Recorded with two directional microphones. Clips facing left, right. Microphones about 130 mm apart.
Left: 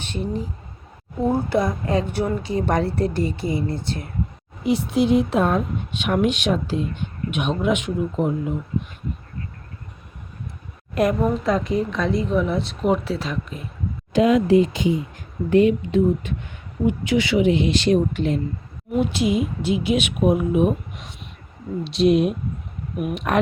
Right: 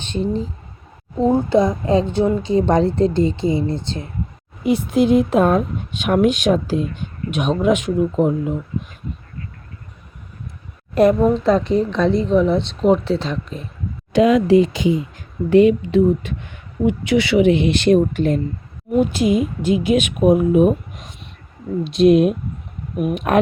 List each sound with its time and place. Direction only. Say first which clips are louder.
0.0 s speech: right 5 dB; 25° right (ahead or behind)
4.6 s a woman's voice: right 3 dB; 50° right (ahead or behind)
10.9 s speech: right 6 dB; 30° right (ahead or behind)
14.1 s speech: right 3 dB; 90° right
16.8 s a woman's voice: right 3 dB; 75° right (ahead or behind); by 23.4 s 50° right (ahead or behind)